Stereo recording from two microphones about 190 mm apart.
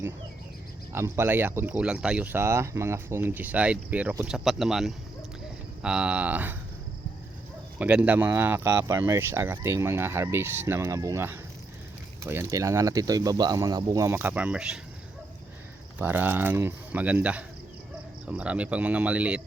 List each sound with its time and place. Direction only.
0.9 s speech: 15° right (ahead or behind)
7.8 s speech: 5° right (ahead or behind)
16.0 s speech: 10° right (ahead or behind)